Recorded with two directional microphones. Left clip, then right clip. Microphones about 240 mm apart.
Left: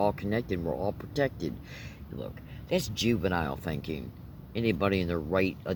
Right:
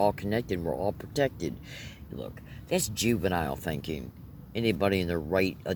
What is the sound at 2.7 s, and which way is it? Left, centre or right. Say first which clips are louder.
Speech: even; right.